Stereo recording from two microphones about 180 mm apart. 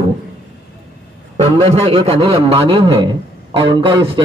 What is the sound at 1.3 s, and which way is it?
A man's voice, 35° right (ahead or behind).